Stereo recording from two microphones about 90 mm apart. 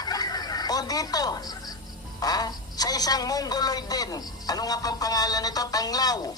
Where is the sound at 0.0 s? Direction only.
45° left (ahead or behind).